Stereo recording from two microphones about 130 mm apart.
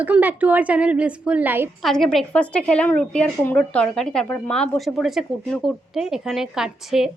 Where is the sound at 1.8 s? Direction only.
5° left (ahead or behind).